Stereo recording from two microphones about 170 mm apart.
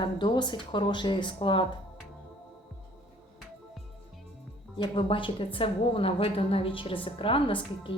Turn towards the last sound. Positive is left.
turn(degrees=30)  # may be behind; listen again after turning